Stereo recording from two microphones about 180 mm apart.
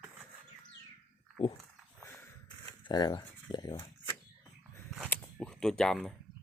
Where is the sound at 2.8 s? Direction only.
25° left (ahead or behind).